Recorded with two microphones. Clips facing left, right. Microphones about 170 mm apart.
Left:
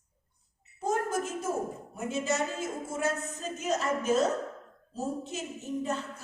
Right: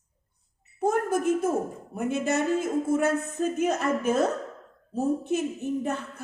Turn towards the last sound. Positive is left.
turn(degrees=-55)  # may be behind; listen again after turning